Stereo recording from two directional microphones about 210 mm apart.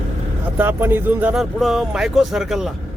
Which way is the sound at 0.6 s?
10° right (ahead or behind).